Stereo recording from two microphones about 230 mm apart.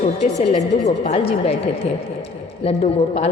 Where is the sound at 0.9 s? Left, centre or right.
Left.